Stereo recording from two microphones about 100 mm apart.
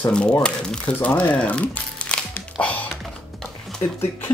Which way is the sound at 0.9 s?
15° left (ahead or behind).